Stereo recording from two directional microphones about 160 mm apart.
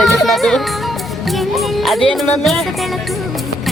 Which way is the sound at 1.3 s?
Centre (ahead or behind).